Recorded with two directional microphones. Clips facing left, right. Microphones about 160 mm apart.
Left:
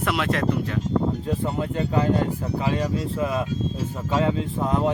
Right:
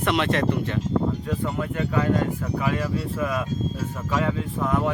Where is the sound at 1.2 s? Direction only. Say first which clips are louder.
Left 1 dB; 30° left (ahead or behind).